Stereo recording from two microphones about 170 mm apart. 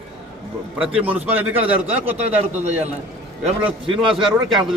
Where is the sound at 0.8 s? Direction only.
10° right (ahead or behind).